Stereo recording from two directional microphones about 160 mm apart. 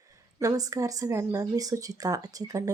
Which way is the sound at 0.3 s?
20° right (ahead or behind).